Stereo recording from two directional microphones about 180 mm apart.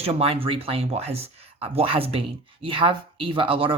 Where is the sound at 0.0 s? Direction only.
30° right (ahead or behind).